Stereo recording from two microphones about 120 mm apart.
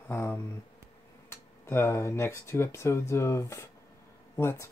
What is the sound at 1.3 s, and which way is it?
Speech, 20° left (ahead or behind).